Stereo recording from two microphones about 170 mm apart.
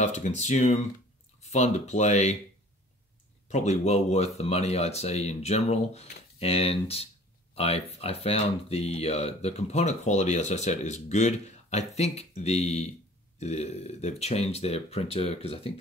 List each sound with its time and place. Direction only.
0.0 s speech: 45° left (ahead or behind)
3.4 s speech: 40° left (ahead or behind)